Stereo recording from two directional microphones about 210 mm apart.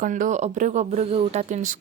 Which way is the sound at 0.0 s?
40° right (ahead or behind).